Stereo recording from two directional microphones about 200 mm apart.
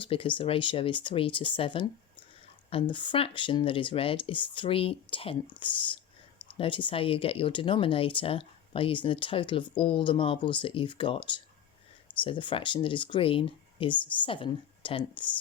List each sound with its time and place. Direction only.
0.0 s speech: 25° left (ahead or behind)